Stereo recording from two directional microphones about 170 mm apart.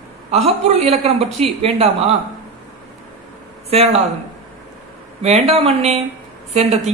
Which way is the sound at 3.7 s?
40° right (ahead or behind).